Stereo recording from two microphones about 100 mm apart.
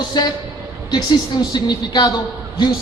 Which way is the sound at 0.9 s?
45° left (ahead or behind).